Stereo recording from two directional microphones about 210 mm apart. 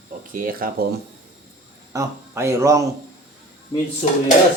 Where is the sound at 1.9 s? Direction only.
15° right (ahead or behind).